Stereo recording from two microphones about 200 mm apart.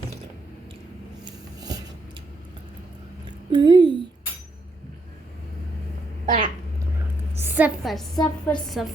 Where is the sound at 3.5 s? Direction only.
20° right (ahead or behind).